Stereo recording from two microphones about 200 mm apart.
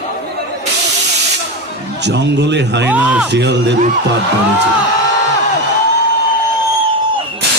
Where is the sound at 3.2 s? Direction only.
60° right (ahead or behind).